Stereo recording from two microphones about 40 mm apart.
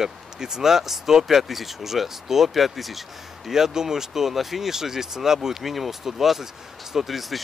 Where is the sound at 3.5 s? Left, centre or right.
Centre.